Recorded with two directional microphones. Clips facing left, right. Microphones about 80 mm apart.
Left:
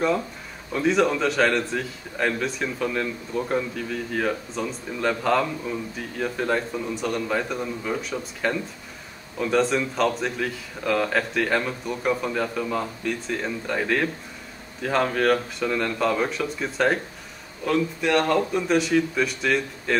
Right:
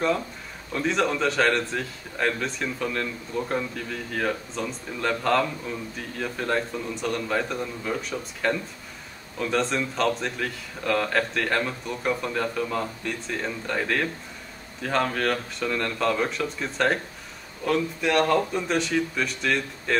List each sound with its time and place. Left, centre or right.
0.7 s a man's voice: centre